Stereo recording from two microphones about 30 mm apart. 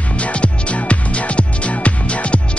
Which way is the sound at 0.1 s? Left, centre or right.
Left.